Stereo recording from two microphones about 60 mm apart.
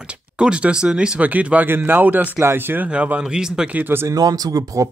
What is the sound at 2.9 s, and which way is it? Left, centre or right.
Speech, right.